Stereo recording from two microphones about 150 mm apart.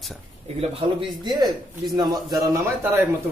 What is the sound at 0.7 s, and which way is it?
Speech, 30° right (ahead or behind).